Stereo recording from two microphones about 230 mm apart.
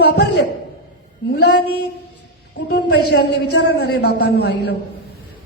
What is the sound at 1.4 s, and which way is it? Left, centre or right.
Speech, left.